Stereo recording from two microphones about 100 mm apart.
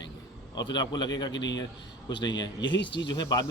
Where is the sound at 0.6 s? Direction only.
45° left (ahead or behind).